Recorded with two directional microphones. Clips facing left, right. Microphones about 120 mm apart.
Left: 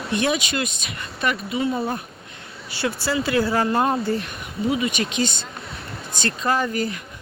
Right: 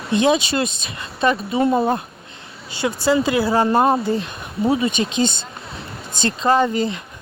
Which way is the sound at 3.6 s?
35° right (ahead or behind).